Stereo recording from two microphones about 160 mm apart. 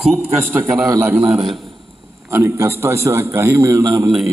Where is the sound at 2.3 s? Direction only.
15° right (ahead or behind).